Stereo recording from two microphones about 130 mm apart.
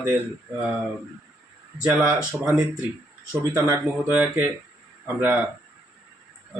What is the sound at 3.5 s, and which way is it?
Speech, 20° right (ahead or behind).